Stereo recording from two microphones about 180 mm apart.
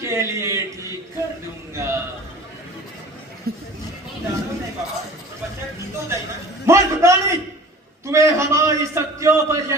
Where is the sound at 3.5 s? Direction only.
60° right (ahead or behind).